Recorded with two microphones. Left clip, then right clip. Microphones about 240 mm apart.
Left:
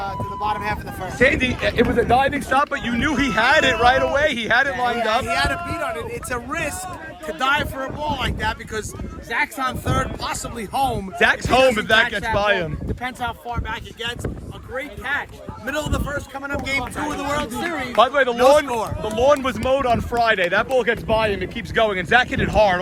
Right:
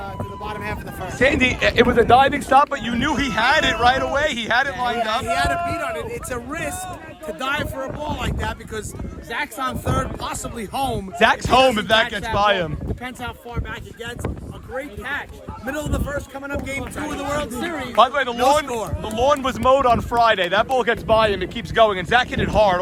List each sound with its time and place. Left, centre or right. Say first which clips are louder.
0.4 s speech: left 6 dB; centre
1.0 s speech: left 1 dB; centre
1.4 s speech: right 3 dB; right; by 6.7 s centre
9.3 s speech: left 3 dB; centre
13.5 s a man's voice: left 4 dB; centre
17.9 s speech: even; centre